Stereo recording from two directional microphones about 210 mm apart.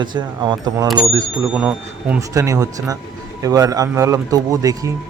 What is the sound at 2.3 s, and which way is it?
A man's voice, 15° right (ahead or behind).